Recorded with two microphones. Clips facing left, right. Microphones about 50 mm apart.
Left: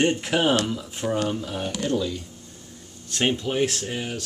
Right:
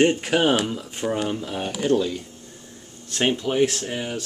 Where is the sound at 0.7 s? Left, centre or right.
Right.